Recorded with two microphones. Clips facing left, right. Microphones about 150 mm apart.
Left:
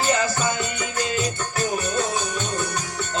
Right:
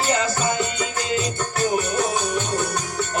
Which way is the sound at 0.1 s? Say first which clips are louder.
Right 2 dB; 25° right (ahead or behind).